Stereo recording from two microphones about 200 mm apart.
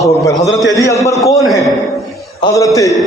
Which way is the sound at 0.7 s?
15° left (ahead or behind).